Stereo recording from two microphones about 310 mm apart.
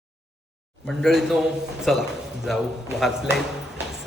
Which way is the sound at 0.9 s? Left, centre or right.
Centre.